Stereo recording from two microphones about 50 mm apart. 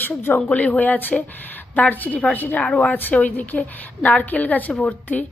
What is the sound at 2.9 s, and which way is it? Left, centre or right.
A woman's voice, left.